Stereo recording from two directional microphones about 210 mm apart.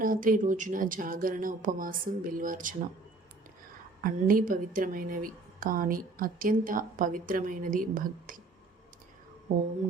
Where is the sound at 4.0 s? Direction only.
40° right (ahead or behind).